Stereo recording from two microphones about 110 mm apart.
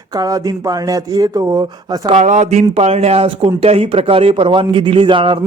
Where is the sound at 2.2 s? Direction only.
90° right.